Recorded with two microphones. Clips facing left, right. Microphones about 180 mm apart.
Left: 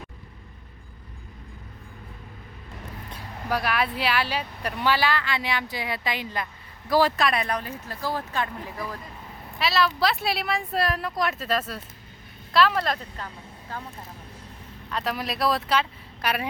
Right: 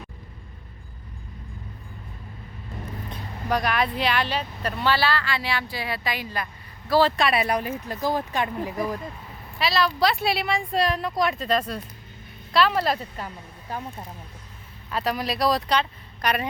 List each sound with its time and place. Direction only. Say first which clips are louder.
3.1 s speech: right 2 dB; 5° left (ahead or behind)
7.2 s speech: right 2 dB; 5° right (ahead or behind)
7.4 s speech: right 4 dB; 15° right (ahead or behind)
9.6 s a woman's voice: right 1 dB; centre (ahead or behind); by 13.8 s 15° right (ahead or behind)
14.8 s speech: right 3 dB; 5° right (ahead or behind)